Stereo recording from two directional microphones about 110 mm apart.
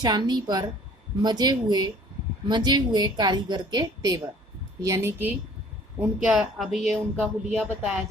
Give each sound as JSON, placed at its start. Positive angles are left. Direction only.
{"t": 0.0, "sound": "a woman's voice", "side_deg": -40}
{"t": 4.9, "sound": "a woman's voice", "side_deg": -20}
{"t": 6.0, "sound": "speech", "side_deg": -10}